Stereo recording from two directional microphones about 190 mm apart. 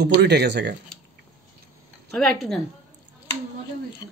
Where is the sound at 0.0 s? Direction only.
60° right (ahead or behind).